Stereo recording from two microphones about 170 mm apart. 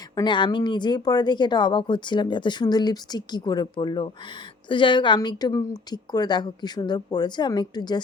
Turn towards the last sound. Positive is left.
turn(degrees=25)  # may be behind; listen again after turning